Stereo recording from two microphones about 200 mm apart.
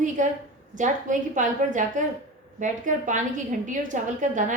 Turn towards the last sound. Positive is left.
turn(degrees=-40)  # may be behind; listen again after turning